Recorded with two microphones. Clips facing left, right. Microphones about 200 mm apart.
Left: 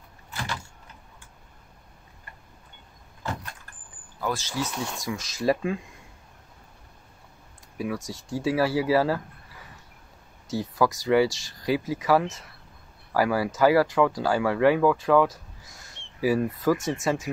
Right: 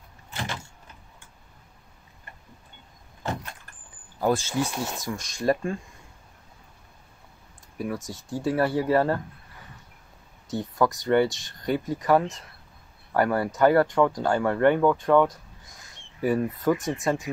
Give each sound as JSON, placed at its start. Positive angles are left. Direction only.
{"t": 0.3, "sound": "vehicle", "side_deg": -25}
{"t": 4.6, "sound": "speech", "side_deg": -15}
{"t": 4.9, "sound": "speech", "side_deg": 0}
{"t": 7.7, "sound": "speech", "side_deg": 0}
{"t": 10.5, "sound": "speech", "side_deg": 0}